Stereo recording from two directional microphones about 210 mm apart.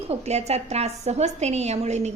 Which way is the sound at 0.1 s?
30° right (ahead or behind).